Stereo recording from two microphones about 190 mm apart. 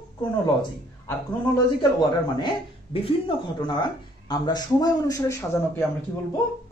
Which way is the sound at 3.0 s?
25° left (ahead or behind).